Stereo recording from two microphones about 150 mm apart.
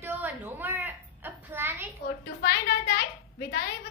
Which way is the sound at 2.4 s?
90° left.